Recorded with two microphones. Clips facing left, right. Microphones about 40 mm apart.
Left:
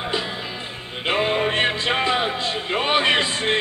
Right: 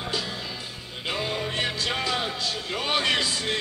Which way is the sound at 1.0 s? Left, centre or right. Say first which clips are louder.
Left 8 dB; left.